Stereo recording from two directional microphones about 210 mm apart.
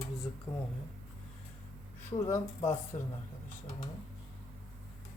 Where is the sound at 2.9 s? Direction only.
25° left (ahead or behind).